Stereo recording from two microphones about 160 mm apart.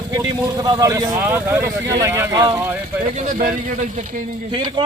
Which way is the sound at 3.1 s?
55° right (ahead or behind).